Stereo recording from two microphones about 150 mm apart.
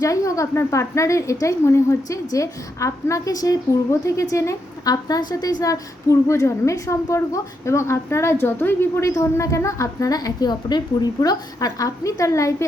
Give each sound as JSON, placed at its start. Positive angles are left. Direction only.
{"t": 0.0, "sound": "a woman's voice", "side_deg": 20}